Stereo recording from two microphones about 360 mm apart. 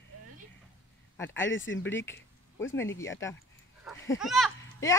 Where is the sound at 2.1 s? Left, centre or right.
Left.